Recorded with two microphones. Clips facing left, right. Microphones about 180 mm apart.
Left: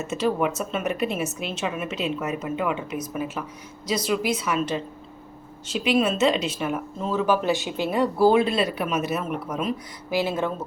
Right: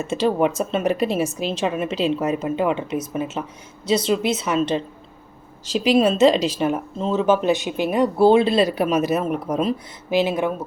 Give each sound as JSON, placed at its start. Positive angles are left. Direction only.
{"t": 0.0, "sound": "a woman's voice", "side_deg": -30}
{"t": 10.1, "sound": "speech", "side_deg": -20}